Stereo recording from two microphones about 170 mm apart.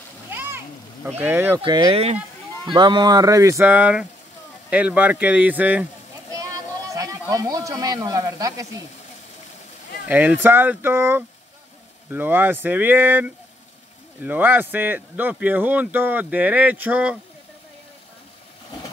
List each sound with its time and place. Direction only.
0.3 s splash: 10° right (ahead or behind)
1.2 s speech: 10° right (ahead or behind)
1.6 s speech: 30° right (ahead or behind)
10.0 s speech: 10° right (ahead or behind)